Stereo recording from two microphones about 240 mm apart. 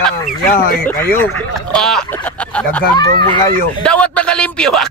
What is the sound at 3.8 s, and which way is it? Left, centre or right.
Speech, centre.